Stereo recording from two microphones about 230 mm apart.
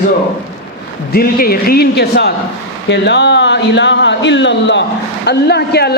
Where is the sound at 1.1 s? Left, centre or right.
Left.